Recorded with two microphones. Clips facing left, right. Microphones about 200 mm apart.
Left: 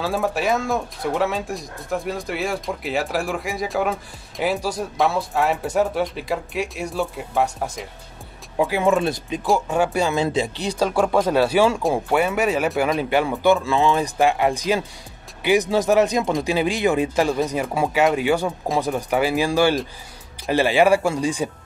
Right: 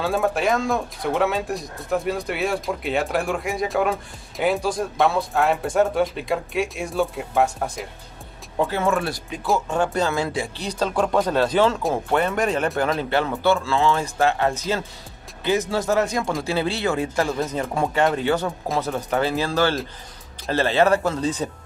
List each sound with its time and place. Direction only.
0.0 s speech: centre (ahead or behind)
8.6 s speech: 15° left (ahead or behind)
9.7 s speech: 10° left (ahead or behind)